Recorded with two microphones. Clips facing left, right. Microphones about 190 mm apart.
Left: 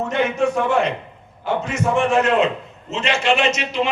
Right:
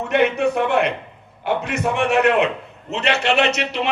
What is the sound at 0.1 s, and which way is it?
A man's voice, 65° right (ahead or behind).